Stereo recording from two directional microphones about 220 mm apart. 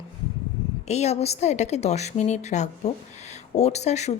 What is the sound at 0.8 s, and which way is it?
Speech, 30° left (ahead or behind).